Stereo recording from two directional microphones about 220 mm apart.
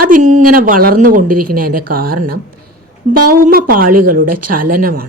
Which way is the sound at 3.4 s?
40° right (ahead or behind).